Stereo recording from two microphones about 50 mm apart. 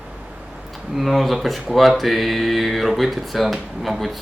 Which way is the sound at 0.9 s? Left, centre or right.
Centre.